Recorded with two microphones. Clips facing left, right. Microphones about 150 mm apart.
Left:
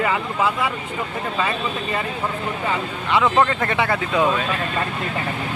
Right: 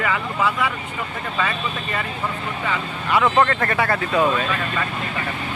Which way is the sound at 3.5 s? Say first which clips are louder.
Even; 15° left (ahead or behind).